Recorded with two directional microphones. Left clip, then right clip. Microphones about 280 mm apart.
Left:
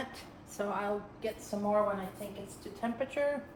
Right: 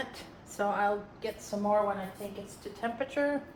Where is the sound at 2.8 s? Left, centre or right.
Right.